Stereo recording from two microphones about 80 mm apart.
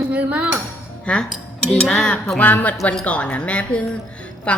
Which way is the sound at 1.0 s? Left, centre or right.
Centre.